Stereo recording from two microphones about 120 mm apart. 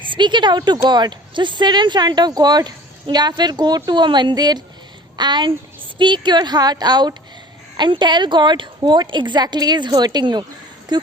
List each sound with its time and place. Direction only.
0.0 s speech: 40° right (ahead or behind)